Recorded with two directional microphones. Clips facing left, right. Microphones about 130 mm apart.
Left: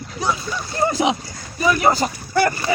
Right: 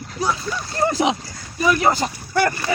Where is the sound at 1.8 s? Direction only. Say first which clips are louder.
Left 1 dB; 30° left (ahead or behind).